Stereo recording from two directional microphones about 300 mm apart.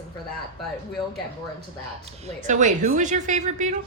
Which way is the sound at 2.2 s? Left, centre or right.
Right.